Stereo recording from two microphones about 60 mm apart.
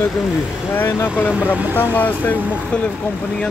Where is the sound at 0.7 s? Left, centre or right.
Left.